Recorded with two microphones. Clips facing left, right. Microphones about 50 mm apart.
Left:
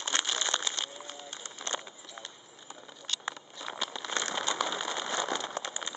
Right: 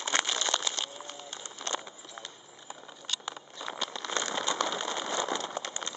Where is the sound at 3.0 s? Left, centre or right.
Centre.